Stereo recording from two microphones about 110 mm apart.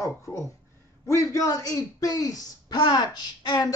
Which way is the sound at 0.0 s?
30° left (ahead or behind).